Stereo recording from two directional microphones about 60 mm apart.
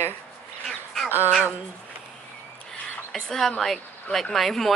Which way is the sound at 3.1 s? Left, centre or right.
Centre.